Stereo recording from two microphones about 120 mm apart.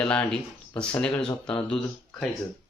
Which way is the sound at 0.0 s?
10° left (ahead or behind).